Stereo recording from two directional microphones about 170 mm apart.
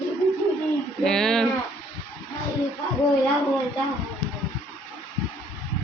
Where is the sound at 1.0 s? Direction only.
5° left (ahead or behind).